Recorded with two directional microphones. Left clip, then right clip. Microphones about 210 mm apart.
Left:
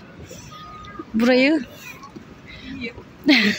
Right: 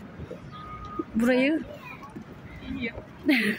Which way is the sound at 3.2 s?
30° left (ahead or behind).